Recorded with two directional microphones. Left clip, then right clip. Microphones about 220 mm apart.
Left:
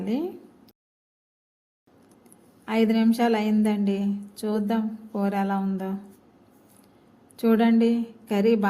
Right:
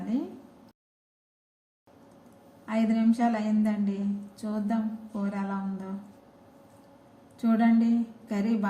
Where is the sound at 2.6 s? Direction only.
50° left (ahead or behind).